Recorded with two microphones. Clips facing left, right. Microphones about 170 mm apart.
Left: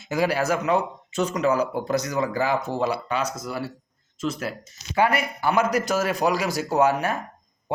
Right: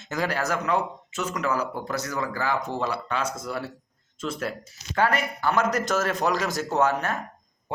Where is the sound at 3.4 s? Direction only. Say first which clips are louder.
Left 1 dB; 5° left (ahead or behind).